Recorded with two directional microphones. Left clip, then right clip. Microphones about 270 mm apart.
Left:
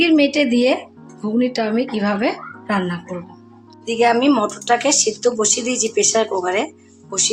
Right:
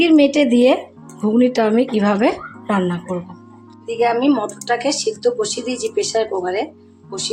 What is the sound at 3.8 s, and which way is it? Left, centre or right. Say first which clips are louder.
A woman's voice: left 1 dB; centre.